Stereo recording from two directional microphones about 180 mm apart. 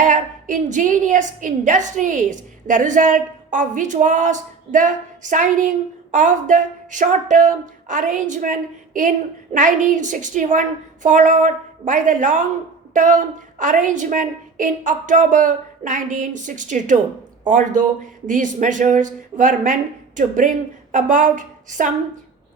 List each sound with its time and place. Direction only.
0.0 s a woman's voice: 45° right (ahead or behind)